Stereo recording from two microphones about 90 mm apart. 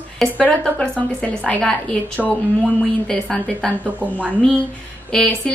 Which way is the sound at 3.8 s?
15° right (ahead or behind).